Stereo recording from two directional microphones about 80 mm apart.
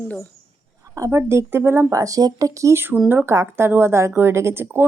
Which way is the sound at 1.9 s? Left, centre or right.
Right.